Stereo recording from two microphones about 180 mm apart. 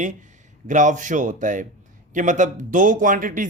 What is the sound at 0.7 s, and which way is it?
Speech, 45° right (ahead or behind).